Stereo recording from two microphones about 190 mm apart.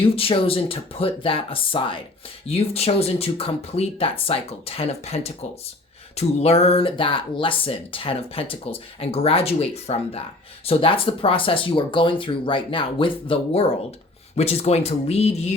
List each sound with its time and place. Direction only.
0.0 s speech: 30° left (ahead or behind)